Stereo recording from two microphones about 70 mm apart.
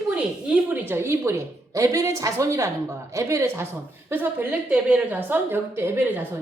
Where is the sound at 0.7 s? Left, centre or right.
Right.